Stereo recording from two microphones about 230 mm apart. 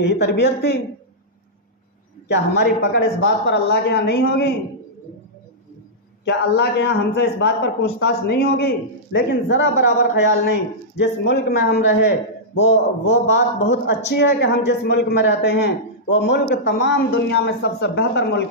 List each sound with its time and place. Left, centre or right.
0.0 s speech: left
2.2 s speech: left
6.2 s speech: left